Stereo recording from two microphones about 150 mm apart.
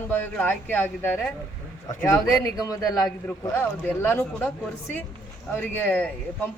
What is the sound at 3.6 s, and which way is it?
Speech, 10° left (ahead or behind).